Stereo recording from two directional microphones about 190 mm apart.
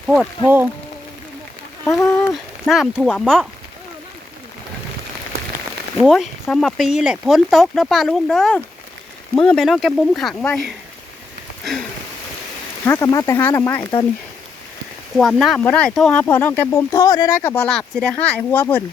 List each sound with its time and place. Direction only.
0.1 s speech: 5° right (ahead or behind)
1.9 s speech: 15° left (ahead or behind)
2.3 s speech: centre (ahead or behind)
6.0 s speech: centre (ahead or behind)
11.6 s a sound: centre (ahead or behind)
12.8 s speech: 15° left (ahead or behind)
15.2 s speech: centre (ahead or behind); by 17.5 s 20° left (ahead or behind)
17.5 s speech: 5° left (ahead or behind)